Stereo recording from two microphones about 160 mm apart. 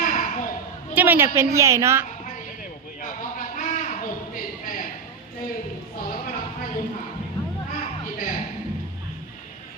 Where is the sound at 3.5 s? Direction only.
55° left (ahead or behind).